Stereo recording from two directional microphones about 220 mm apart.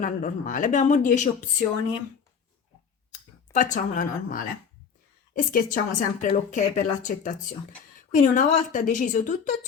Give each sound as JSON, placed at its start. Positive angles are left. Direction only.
{"t": 0.0, "sound": "a woman's voice", "side_deg": 35}
{"t": 3.1, "sound": "a woman's voice", "side_deg": 35}